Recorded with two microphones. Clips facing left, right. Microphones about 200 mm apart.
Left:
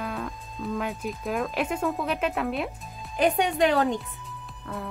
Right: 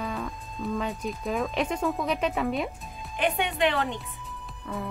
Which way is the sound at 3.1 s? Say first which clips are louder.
Left 4 dB; 40° left (ahead or behind).